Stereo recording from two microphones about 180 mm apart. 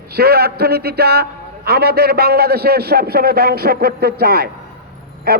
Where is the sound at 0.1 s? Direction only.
60° right (ahead or behind).